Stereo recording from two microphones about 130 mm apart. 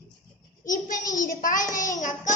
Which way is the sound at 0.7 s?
90° left.